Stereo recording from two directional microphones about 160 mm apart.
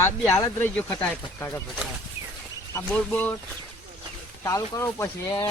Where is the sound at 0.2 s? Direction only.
5° left (ahead or behind).